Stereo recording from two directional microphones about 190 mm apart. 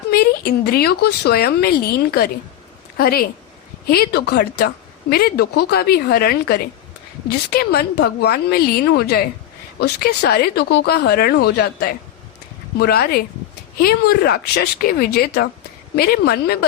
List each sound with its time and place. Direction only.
0.1 s speech: 55° left (ahead or behind)
3.0 s a woman's voice: 50° left (ahead or behind)